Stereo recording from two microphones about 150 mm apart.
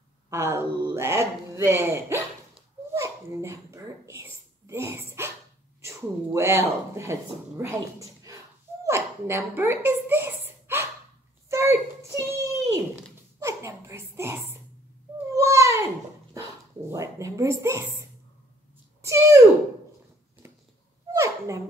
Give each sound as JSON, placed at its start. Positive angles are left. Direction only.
{"t": 0.3, "sound": "speech", "side_deg": -20}
{"t": 2.9, "sound": "dog", "side_deg": -20}
{"t": 5.8, "sound": "speech", "side_deg": -20}
{"t": 8.8, "sound": "a sound", "side_deg": -15}
{"t": 16.9, "sound": "a woman's voice", "side_deg": -20}
{"t": 19.0, "sound": "a woman's voice", "side_deg": -20}
{"t": 21.1, "sound": "a sound", "side_deg": -20}